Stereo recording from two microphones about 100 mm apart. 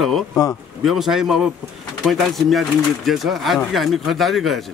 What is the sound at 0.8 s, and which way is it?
A man's voice, 5° right (ahead or behind).